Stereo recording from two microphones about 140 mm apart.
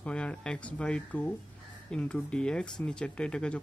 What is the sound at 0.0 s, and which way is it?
Speech, 10° left (ahead or behind).